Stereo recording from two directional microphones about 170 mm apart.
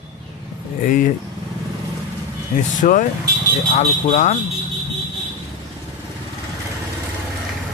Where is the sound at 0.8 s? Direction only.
55° left (ahead or behind).